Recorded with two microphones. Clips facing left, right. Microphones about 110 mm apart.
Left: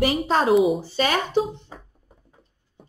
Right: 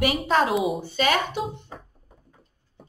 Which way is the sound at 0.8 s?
35° left (ahead or behind).